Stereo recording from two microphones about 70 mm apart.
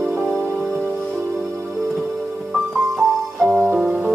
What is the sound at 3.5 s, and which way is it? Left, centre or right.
Music, right.